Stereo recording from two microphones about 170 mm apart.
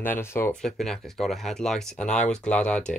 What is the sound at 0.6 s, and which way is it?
Speech, centre (ahead or behind).